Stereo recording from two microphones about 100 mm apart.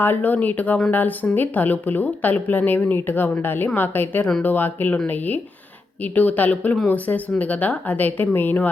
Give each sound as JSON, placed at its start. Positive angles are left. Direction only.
{"t": 0.0, "sound": "a woman's voice", "side_deg": 20}